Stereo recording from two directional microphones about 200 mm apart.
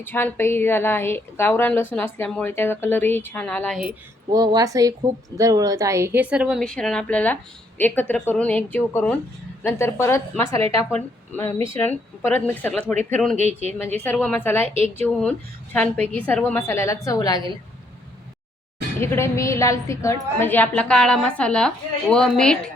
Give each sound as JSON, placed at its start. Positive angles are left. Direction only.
{"t": 0.0, "sound": "a woman's voice", "side_deg": 10}
{"t": 4.3, "sound": "a woman's voice", "side_deg": -20}
{"t": 13.3, "sound": "speech", "side_deg": -35}
{"t": 14.0, "sound": "a woman's voice", "side_deg": 10}
{"t": 14.6, "sound": "speech", "side_deg": -30}
{"t": 15.0, "sound": "a woman's voice", "side_deg": 5}
{"t": 18.9, "sound": "a woman's voice", "side_deg": 10}